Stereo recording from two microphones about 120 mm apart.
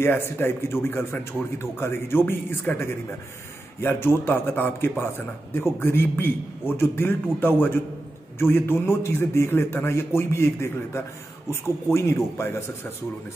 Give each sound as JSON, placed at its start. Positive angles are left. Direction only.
{"t": 0.0, "sound": "a man's voice", "side_deg": 20}